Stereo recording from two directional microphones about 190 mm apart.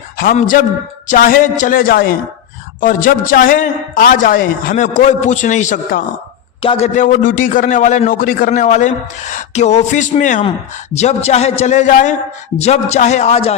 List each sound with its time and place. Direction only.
0.2 s a man's voice: 45° left (ahead or behind)